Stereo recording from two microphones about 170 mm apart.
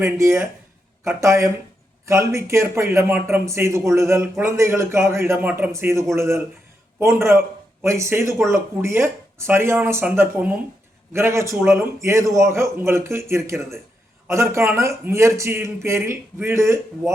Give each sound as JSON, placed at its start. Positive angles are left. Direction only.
{"t": 0.0, "sound": "a man's voice", "side_deg": -15}